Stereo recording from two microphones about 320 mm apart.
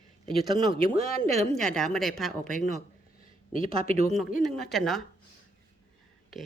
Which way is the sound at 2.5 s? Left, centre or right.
Right.